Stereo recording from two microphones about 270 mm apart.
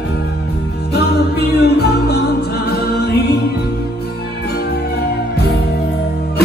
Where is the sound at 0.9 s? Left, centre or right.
Left.